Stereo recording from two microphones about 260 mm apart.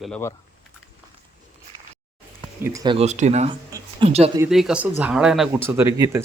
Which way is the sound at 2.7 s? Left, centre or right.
Centre.